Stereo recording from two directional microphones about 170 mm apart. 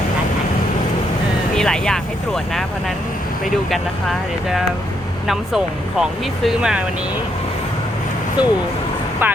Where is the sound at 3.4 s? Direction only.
Centre (ahead or behind).